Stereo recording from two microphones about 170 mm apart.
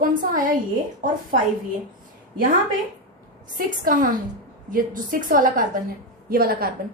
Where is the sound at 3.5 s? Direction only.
55° right (ahead or behind).